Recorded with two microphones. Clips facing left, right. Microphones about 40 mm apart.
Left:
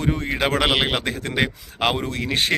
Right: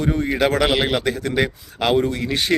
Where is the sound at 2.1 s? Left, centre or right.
Left.